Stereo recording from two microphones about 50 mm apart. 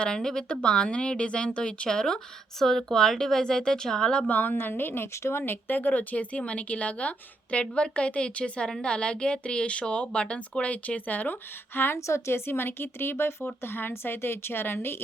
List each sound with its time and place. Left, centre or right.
0.0 s speech: centre
4.3 s speech: left
4.5 s a woman's voice: left
11.9 s speech: left